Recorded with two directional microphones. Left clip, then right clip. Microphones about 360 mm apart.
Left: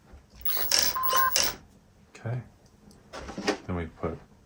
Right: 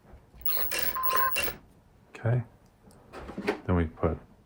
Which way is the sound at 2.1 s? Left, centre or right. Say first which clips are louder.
Right 6 dB; right.